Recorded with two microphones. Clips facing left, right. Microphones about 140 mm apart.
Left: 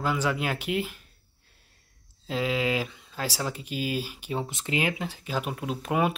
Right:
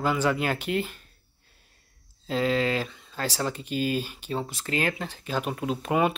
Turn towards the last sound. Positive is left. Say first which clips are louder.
# right 2 dB
turn(degrees=0)  # may be behind; listen again after turning